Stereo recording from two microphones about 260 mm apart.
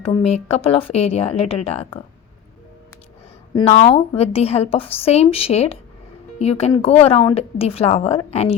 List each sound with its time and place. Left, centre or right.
0.0 s a woman's voice: left
3.5 s a woman's voice: left